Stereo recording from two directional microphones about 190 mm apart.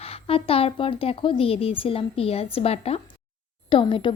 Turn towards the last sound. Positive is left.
turn(degrees=25)  # may be behind; listen again after turning